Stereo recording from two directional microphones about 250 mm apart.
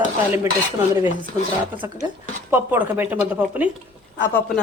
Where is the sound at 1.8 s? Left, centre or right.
Centre.